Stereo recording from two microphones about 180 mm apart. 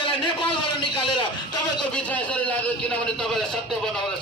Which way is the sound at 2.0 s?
10° left (ahead or behind).